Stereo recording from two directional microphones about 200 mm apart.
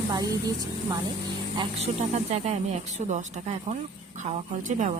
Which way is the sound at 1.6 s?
30° right (ahead or behind).